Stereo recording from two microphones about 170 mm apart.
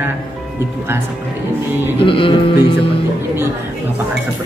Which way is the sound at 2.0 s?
30° left (ahead or behind).